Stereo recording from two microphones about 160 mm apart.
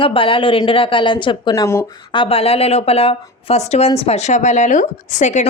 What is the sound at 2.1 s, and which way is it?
Speech, 35° left (ahead or behind).